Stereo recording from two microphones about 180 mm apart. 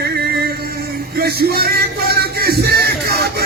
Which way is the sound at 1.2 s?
60° right (ahead or behind).